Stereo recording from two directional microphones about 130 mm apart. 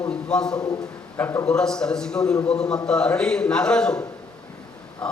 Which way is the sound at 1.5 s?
5° left (ahead or behind).